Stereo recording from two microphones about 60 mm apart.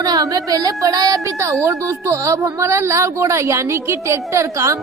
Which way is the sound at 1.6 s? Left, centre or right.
Right.